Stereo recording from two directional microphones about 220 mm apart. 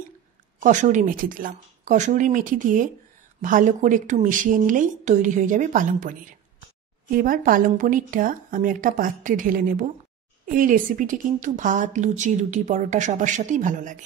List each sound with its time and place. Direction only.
0.6 s speech: 35° right (ahead or behind)